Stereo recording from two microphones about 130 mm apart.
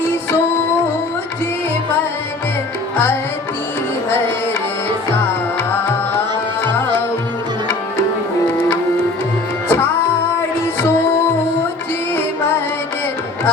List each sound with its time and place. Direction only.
6.7 s music: 15° left (ahead or behind)
8.4 s music: 20° left (ahead or behind)